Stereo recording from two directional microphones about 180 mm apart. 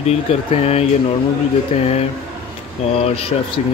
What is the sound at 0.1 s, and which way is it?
Speech, 35° left (ahead or behind).